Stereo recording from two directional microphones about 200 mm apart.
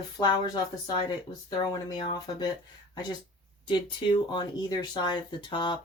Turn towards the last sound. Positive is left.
turn(degrees=25)  # may be behind; listen again after turning